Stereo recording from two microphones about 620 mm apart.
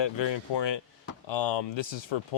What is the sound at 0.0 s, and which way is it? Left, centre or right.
Speech, left.